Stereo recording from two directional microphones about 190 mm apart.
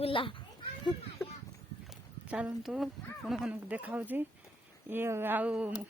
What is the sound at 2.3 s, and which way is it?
A woman's voice, 5° right (ahead or behind).